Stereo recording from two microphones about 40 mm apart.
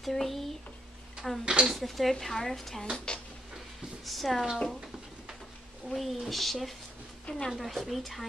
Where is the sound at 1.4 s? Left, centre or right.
Right.